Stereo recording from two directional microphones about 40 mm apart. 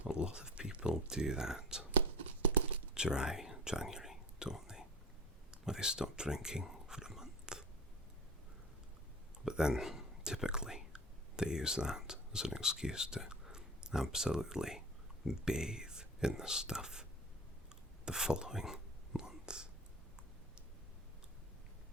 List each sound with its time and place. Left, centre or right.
0.1 s a sound: right
2.9 s whispering: centre
5.5 s speech: centre
7.1 s biting: centre
9.5 s speech: centre
18.0 s whispering: centre